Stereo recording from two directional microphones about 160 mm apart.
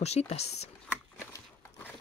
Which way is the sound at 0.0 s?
40° left (ahead or behind).